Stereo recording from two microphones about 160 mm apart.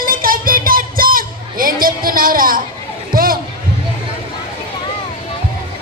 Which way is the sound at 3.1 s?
65° right (ahead or behind).